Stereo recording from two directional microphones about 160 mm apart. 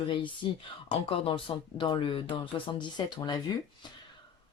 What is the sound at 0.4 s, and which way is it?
Speech, 30° left (ahead or behind).